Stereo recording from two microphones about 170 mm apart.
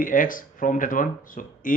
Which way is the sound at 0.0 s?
55° left (ahead or behind).